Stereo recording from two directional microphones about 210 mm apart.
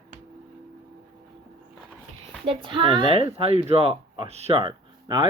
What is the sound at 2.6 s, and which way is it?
Speech, 25° right (ahead or behind).